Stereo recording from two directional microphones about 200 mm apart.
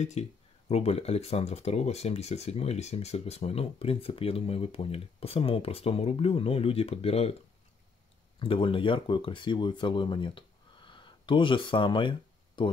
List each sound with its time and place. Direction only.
0.0 s speech: 35° left (ahead or behind)
8.4 s speech: 25° left (ahead or behind)